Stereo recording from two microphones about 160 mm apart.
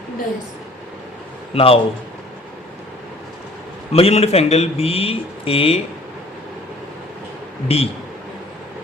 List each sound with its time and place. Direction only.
1.5 s speech: 35° left (ahead or behind)
3.9 s speech: 40° left (ahead or behind)
7.7 s speech: 40° left (ahead or behind)